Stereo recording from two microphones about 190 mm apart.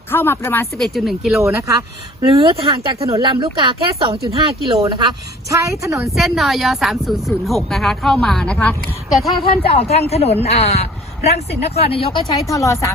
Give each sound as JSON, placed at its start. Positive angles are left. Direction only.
{"t": 0.1, "sound": "speech", "side_deg": 10}
{"t": 0.8, "sound": "speech", "side_deg": 0}
{"t": 1.4, "sound": "a woman's voice", "side_deg": -15}
{"t": 2.2, "sound": "a woman's voice", "side_deg": -30}
{"t": 6.1, "sound": "speech", "side_deg": 0}
{"t": 9.3, "sound": "a man's voice", "side_deg": 30}
{"t": 12.5, "sound": "speech", "side_deg": 15}